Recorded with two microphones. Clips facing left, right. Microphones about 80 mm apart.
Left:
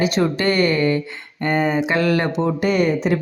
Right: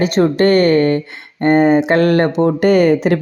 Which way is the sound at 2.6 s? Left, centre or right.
Right.